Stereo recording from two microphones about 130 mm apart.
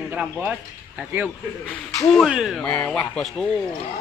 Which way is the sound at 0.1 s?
15° right (ahead or behind).